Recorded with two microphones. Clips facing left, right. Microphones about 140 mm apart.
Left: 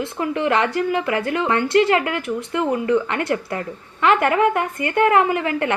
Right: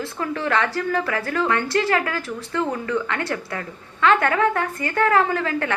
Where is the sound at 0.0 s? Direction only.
20° left (ahead or behind).